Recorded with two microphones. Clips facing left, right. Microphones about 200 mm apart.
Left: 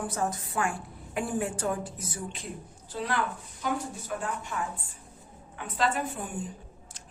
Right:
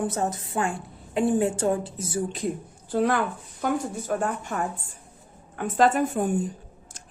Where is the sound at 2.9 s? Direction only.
55° right (ahead or behind).